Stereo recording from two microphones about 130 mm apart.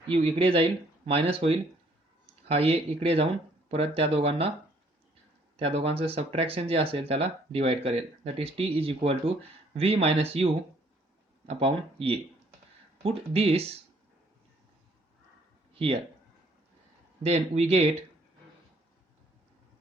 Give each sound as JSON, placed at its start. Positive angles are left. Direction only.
{"t": 0.2, "sound": "speech", "side_deg": -45}
{"t": 5.5, "sound": "speech", "side_deg": -50}
{"t": 15.7, "sound": "a sound", "side_deg": -45}
{"t": 17.2, "sound": "speech", "side_deg": -55}